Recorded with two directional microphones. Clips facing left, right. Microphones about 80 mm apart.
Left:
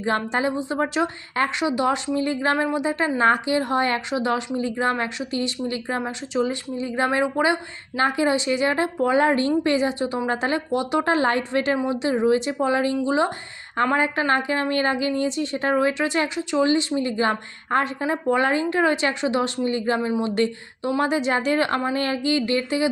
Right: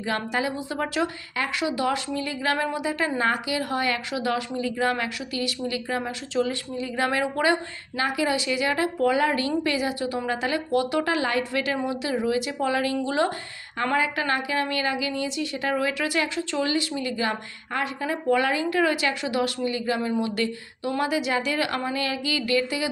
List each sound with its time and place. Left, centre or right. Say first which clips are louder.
0.0 s a woman's voice: left 4 dB; left
6.0 s a woman's voice: left 2 dB; left
7.9 s a woman's voice: left 4 dB; left
10.7 s a woman's voice: right 1 dB; left
11.0 s a woman's voice: left 4 dB; left; by 13.3 s centre
13.9 s a woman's voice: left 2 dB; left
20.0 s a woman's voice: left 3 dB; centre